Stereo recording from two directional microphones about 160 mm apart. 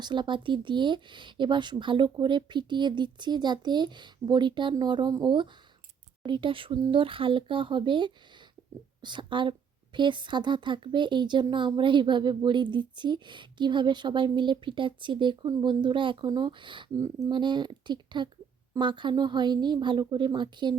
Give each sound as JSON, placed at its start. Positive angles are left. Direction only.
{"t": 0.0, "sound": "a woman's voice", "side_deg": -30}